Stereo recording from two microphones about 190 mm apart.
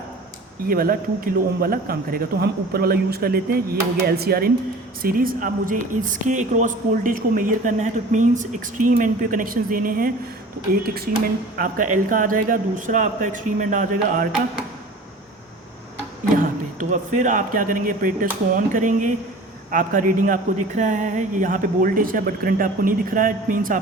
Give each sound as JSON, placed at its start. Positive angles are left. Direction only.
{"t": 0.7, "sound": "speech", "side_deg": -50}
{"t": 16.9, "sound": "speech", "side_deg": -40}